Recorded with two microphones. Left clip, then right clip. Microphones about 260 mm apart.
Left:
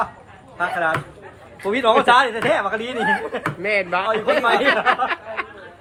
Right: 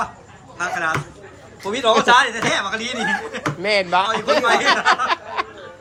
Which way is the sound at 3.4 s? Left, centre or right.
Centre.